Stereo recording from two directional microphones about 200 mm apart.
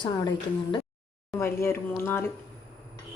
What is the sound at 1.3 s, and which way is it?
Speech, 15° left (ahead or behind).